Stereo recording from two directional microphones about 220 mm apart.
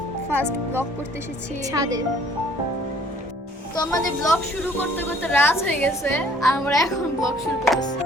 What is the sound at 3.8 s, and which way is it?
A woman's voice, 15° left (ahead or behind).